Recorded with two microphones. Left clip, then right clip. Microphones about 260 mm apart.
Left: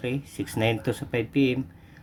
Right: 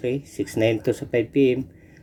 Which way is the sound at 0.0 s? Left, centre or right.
Centre.